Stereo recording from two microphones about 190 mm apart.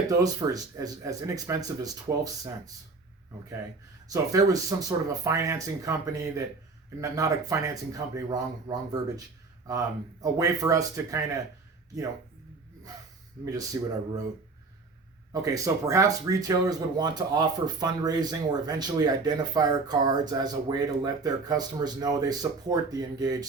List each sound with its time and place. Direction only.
0.2 s speech: 20° right (ahead or behind)
4.1 s speech: 20° right (ahead or behind)
7.0 s speech: 15° right (ahead or behind)
13.4 s speech: 20° right (ahead or behind)
15.3 s speech: 15° right (ahead or behind)